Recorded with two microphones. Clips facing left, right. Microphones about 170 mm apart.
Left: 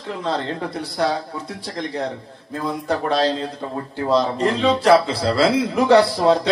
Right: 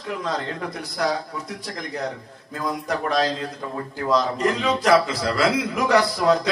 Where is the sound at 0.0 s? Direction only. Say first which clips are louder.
Left 3 dB; 30° left (ahead or behind).